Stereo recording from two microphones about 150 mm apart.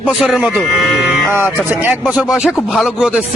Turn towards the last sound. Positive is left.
turn(degrees=-5)  # may be behind; listen again after turning